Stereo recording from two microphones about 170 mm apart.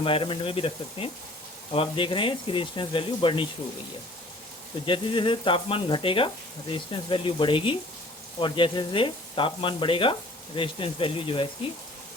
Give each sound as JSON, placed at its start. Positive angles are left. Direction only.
{"t": 0.0, "sound": "speech", "side_deg": 30}
{"t": 4.9, "sound": "speech", "side_deg": 30}